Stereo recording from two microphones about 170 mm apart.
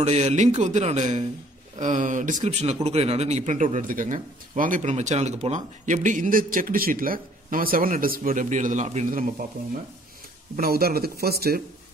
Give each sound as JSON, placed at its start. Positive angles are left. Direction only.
{"t": 0.0, "sound": "a man's voice", "side_deg": -40}
{"t": 10.5, "sound": "speech", "side_deg": -60}